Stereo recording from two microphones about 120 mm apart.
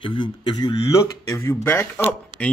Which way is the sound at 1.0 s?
20° left (ahead or behind).